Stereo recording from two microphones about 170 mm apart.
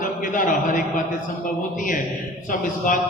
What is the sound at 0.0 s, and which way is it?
Speech, 50° left (ahead or behind).